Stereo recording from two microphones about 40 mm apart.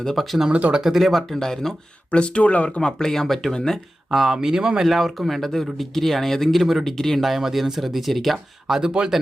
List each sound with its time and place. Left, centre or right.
0.2 s speech: centre
1.3 s speech: centre
2.0 s speech: left
2.6 s speech: centre
4.1 s speech: centre
4.8 s speech: centre
6.8 s speech: centre
7.2 s speech: centre
8.6 s speech: centre